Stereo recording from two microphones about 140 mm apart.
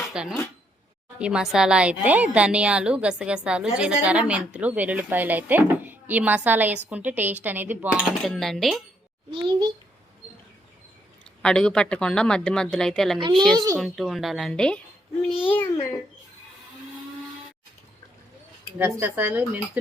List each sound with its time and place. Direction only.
0.0 s a sound: 5° right (ahead or behind)
1.2 s a woman's voice: 5° right (ahead or behind)
8.2 s a woman's voice: centre (ahead or behind)
9.3 s a child's voice: 30° right (ahead or behind)
11.4 s a woman's voice: 5° left (ahead or behind)
13.1 s a child's voice: 35° right (ahead or behind)
13.7 s a woman's voice: centre (ahead or behind)
15.4 s a child's voice: 15° left (ahead or behind)
18.8 s a woman's voice: 15° right (ahead or behind)